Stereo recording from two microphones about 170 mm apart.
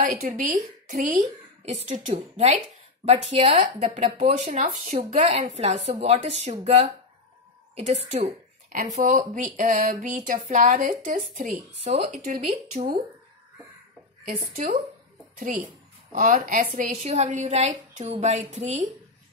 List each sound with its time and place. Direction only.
0.0 s a woman's voice: 45° right (ahead or behind)
14.5 s speech: 55° right (ahead or behind)